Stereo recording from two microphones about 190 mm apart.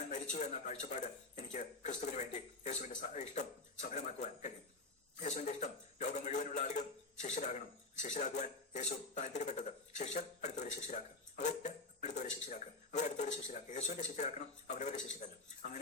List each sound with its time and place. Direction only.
0.1 s speech: 40° left (ahead or behind)